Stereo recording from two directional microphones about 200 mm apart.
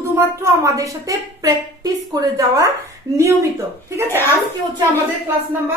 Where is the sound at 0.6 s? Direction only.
15° right (ahead or behind).